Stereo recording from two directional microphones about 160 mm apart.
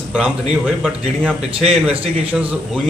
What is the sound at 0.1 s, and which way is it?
A man's voice, 5° right (ahead or behind).